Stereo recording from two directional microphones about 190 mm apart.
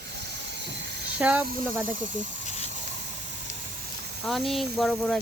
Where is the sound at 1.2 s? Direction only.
5° right (ahead or behind).